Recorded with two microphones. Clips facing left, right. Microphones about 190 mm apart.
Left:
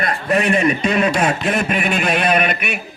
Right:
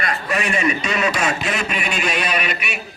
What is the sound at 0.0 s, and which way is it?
A man's voice, 55° left (ahead or behind).